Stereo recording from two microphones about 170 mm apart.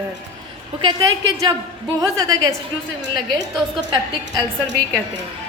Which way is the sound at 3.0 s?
90° right.